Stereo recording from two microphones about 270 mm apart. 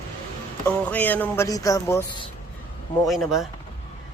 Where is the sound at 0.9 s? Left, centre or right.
Centre.